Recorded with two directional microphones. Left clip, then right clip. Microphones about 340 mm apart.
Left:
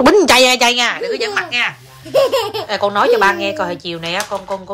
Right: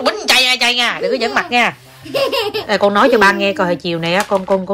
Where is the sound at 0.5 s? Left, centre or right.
Centre.